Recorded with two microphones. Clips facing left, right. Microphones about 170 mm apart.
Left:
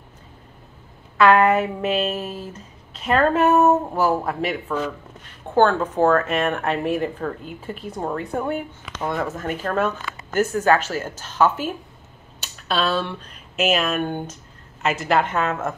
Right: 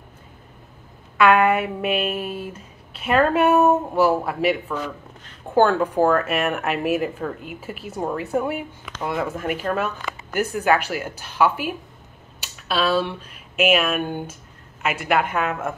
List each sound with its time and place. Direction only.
1.4 s a woman's voice: 30° left (ahead or behind)
2.9 s a woman's voice: 10° right (ahead or behind)